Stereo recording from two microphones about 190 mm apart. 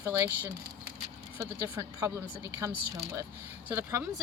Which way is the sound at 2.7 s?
55° right (ahead or behind).